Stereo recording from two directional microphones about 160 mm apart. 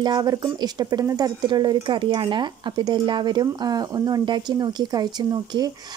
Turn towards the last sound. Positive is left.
turn(degrees=-25)  # may be behind; listen again after turning